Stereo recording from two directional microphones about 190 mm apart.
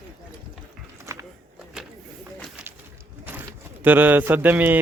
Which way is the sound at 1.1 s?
15° right (ahead or behind).